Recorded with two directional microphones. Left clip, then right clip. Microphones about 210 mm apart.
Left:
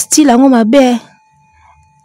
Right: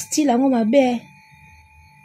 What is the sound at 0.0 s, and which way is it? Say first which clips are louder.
Speech: left 10 dB; 50° left (ahead or behind).